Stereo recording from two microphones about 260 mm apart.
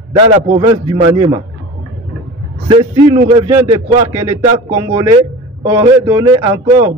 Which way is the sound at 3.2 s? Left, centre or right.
Centre.